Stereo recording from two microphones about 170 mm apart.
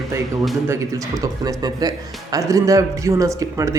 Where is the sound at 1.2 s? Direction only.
20° right (ahead or behind).